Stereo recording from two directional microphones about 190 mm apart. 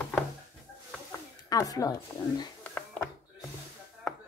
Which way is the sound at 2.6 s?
10° left (ahead or behind).